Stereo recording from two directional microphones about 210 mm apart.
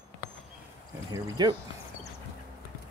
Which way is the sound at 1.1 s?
20° right (ahead or behind).